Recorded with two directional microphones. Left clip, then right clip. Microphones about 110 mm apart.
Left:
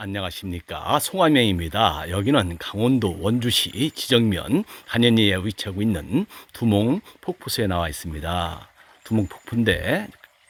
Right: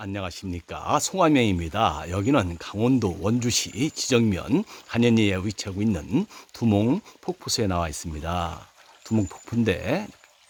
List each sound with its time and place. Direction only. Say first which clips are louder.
0.0 s speech: left 3 dB; 25° left (ahead or behind)
3.0 s speech: left 2 dB; 20° left (ahead or behind)